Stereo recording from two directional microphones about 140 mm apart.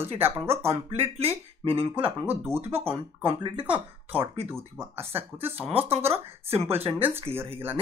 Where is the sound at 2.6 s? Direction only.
45° right (ahead or behind).